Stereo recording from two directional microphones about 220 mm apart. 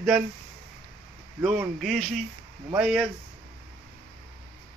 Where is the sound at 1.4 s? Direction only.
5° right (ahead or behind).